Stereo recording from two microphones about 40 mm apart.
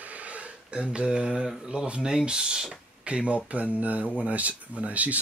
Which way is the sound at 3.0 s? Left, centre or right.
Right.